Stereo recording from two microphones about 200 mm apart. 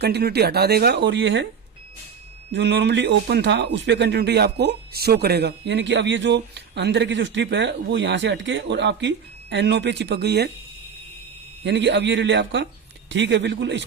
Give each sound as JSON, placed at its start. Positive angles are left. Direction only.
{"t": 0.0, "sound": "speech", "side_deg": -55}
{"t": 2.5, "sound": "speech", "side_deg": -60}
{"t": 11.6, "sound": "speech", "side_deg": -60}